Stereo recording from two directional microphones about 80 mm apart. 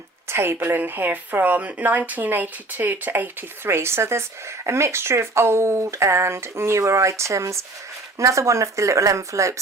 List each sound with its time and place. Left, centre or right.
0.3 s speech: right